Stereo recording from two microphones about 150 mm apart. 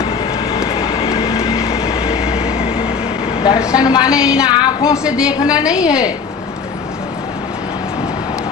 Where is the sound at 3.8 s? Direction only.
25° left (ahead or behind).